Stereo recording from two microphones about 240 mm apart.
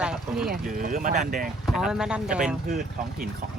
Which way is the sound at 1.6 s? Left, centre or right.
Centre.